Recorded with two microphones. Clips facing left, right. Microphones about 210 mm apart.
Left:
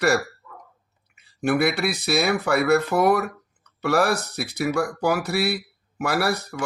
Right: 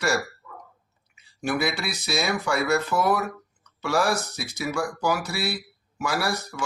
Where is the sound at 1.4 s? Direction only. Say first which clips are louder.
Left 5 dB; 60° left (ahead or behind).